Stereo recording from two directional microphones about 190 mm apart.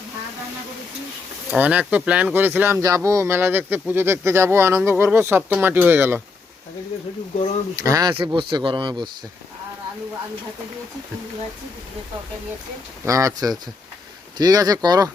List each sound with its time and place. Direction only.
1.5 s speech: 5° right (ahead or behind)
7.8 s speech: 20° right (ahead or behind)
13.1 s speech: 15° right (ahead or behind)